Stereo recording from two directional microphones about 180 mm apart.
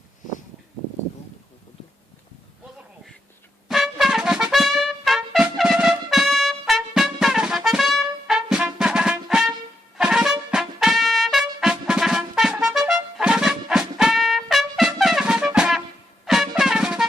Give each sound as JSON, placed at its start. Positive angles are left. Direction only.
{"t": 3.7, "sound": "trumpet", "side_deg": 0}
{"t": 10.0, "sound": "music", "side_deg": -5}
{"t": 10.5, "sound": "trumpet", "side_deg": 0}
{"t": 16.2, "sound": "music", "side_deg": 0}